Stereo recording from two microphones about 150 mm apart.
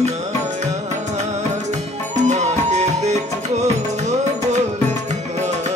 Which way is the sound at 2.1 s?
50° right (ahead or behind).